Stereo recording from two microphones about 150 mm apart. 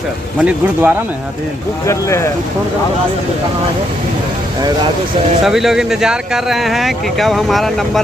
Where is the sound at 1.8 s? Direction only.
20° left (ahead or behind).